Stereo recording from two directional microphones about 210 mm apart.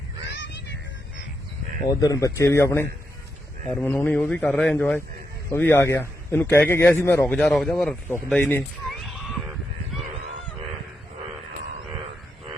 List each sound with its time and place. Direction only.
0.3 s music: 55° left (ahead or behind)
1.9 s a man's voice: 15° left (ahead or behind)